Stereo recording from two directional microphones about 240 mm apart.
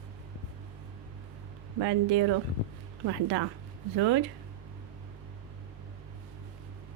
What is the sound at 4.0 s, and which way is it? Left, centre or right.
Speech, right.